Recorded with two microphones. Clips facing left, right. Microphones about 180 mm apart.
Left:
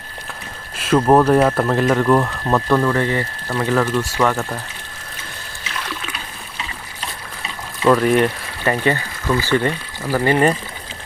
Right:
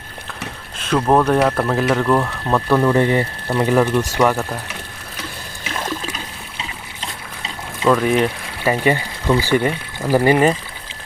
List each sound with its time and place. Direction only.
0.8 s speech: 5° left (ahead or behind)
2.9 s speech: 20° right (ahead or behind)
5.7 s trickle: 45° right (ahead or behind)
7.9 s speech: centre (ahead or behind)
8.7 s speech: 10° right (ahead or behind)